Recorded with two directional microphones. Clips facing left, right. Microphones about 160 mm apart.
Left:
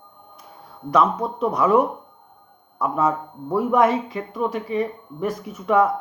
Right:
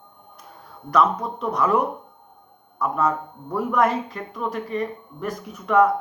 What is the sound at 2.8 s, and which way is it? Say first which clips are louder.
A woman's voice: left 1 dB; 5° left (ahead or behind).